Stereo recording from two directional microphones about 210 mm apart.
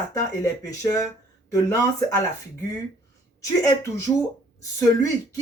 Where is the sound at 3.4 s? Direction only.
15° left (ahead or behind).